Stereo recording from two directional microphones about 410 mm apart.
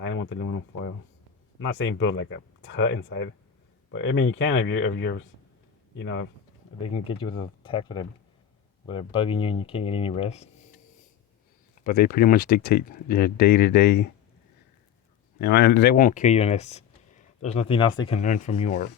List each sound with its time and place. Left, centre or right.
0.0 s speech: left
6.9 s speech: centre
11.8 s speech: left
15.4 s speech: left